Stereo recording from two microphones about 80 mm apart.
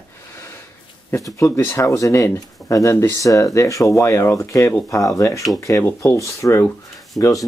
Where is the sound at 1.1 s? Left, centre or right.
Left.